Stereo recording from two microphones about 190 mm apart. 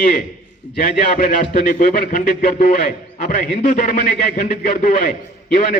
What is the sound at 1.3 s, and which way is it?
A man's voice, 45° left (ahead or behind).